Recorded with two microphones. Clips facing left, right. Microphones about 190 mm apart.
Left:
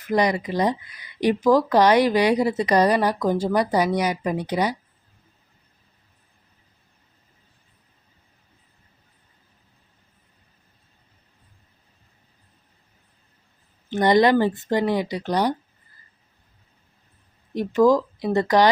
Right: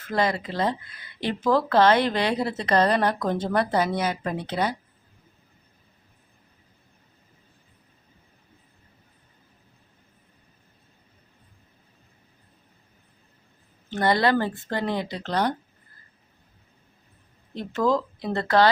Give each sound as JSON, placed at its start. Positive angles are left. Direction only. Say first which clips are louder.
{"t": 0.0, "sound": "speech", "louder": "left 4 dB", "side_deg": 15}
{"t": 13.9, "sound": "speech", "louder": "left 5 dB", "side_deg": 20}
{"t": 17.5, "sound": "speech", "louder": "left 6 dB", "side_deg": 15}